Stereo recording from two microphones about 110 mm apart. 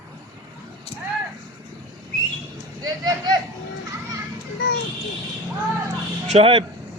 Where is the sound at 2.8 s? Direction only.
35° right (ahead or behind).